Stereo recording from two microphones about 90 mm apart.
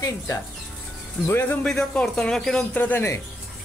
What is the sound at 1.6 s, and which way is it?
Speech, 10° left (ahead or behind).